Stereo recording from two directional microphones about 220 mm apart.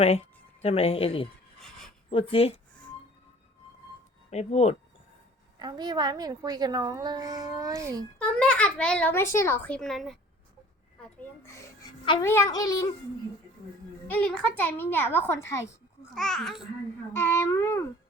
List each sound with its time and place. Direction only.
0.6 s speech: 25° left (ahead or behind)
4.3 s speech: 30° left (ahead or behind)
5.5 s a woman's voice: 20° right (ahead or behind)
8.2 s a child's voice: 5° left (ahead or behind)
14.1 s a woman's voice: 5° left (ahead or behind)